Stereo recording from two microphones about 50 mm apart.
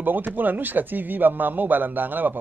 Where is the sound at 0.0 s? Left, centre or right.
Right.